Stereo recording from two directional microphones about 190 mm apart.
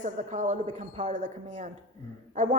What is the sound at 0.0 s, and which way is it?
A woman's voice, 40° right (ahead or behind).